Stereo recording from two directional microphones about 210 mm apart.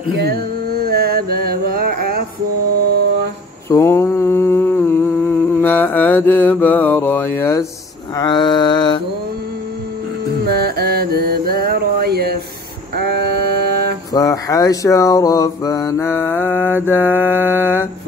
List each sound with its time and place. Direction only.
0.2 s mantra: 45° right (ahead or behind)
3.6 s mantra: 15° left (ahead or behind)
10.4 s mantra: 50° right (ahead or behind)
12.9 s a sound: 50° right (ahead or behind)
14.1 s mantra: 15° left (ahead or behind)
16.3 s mantra: 5° right (ahead or behind)